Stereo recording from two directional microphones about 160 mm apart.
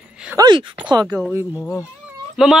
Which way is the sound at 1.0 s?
10° right (ahead or behind).